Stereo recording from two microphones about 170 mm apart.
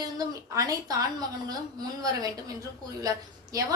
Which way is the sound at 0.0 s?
20° right (ahead or behind).